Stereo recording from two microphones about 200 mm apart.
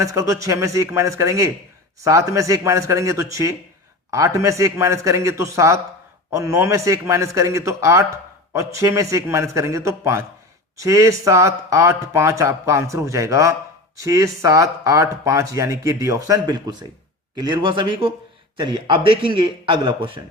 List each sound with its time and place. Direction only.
0.0 s speech: 15° right (ahead or behind)